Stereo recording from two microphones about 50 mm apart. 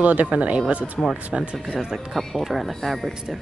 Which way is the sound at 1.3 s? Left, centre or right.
Right.